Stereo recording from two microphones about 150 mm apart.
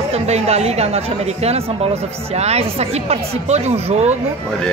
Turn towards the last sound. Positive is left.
turn(degrees=-45)  # may be behind; listen again after turning